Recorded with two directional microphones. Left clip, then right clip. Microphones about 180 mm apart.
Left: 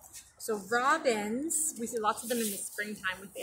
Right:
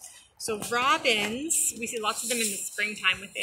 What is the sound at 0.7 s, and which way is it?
Speech, 25° right (ahead or behind).